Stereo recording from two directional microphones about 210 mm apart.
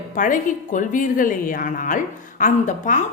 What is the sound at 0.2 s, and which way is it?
A woman's voice, 40° left (ahead or behind).